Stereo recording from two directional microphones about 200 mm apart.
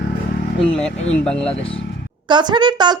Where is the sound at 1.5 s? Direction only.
30° left (ahead or behind).